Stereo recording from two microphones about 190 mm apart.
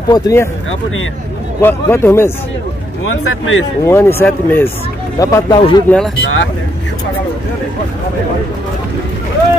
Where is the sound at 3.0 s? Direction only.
90° left.